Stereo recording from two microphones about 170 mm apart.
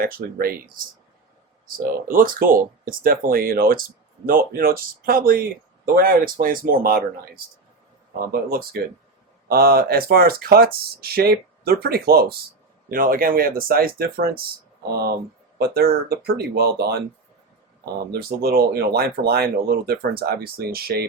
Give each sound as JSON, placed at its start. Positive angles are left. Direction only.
{"t": 0.0, "sound": "speech", "side_deg": -60}
{"t": 15.5, "sound": "speech", "side_deg": -65}
{"t": 18.0, "sound": "speech", "side_deg": -65}